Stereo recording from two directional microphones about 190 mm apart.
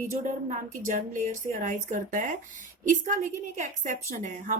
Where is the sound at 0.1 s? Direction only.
40° right (ahead or behind).